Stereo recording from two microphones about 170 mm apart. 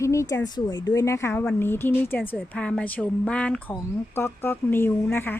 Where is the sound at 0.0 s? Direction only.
15° left (ahead or behind).